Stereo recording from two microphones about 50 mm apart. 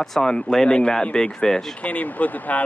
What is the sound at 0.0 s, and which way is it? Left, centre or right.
Speech, centre.